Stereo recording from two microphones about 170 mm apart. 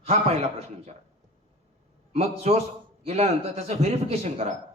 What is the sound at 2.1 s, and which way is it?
A man's voice, 35° right (ahead or behind).